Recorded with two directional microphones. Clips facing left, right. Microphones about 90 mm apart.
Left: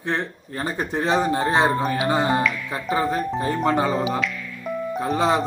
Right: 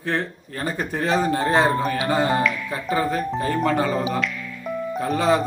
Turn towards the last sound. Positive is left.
turn(degrees=20)  # may be behind; listen again after turning